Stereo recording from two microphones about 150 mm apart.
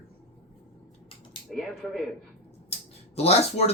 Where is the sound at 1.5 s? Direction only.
Centre (ahead or behind).